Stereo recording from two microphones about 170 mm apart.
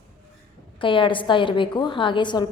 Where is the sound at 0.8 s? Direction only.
30° left (ahead or behind).